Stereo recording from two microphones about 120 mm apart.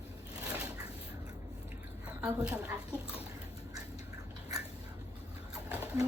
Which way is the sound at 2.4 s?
10° right (ahead or behind).